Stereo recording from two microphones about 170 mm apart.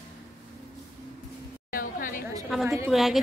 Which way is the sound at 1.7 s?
55° left (ahead or behind).